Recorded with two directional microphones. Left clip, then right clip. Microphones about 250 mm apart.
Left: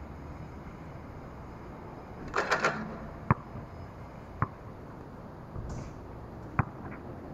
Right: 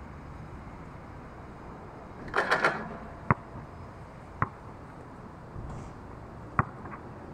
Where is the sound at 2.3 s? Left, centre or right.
Centre.